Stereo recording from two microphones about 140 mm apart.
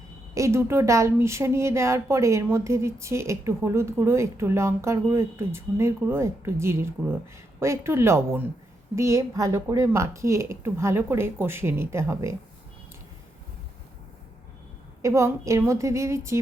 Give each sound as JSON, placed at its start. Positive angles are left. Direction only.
{"t": 0.3, "sound": "a woman's voice", "side_deg": -20}
{"t": 15.0, "sound": "a woman's voice", "side_deg": -20}